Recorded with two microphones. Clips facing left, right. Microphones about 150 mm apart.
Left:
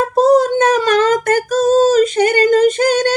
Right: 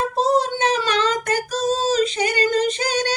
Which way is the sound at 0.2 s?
45° left (ahead or behind).